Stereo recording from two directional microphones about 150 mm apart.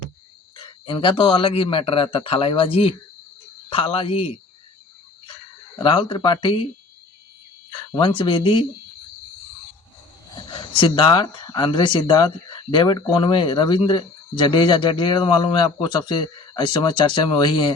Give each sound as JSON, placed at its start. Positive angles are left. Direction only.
{"t": 0.5, "sound": "speech", "side_deg": 35}
{"t": 5.8, "sound": "speech", "side_deg": 35}
{"t": 7.8, "sound": "speech", "side_deg": 35}
{"t": 10.5, "sound": "speech", "side_deg": 35}